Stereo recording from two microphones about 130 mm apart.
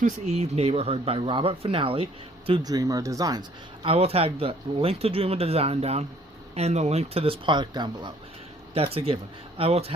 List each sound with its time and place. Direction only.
0.3 s speech: 55° right (ahead or behind)
2.6 s speech: 30° right (ahead or behind)
3.8 s speech: 50° right (ahead or behind)
8.7 s speech: 45° right (ahead or behind)